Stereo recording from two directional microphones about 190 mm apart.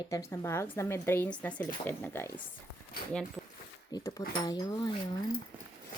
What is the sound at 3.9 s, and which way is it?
Speech, 20° left (ahead or behind).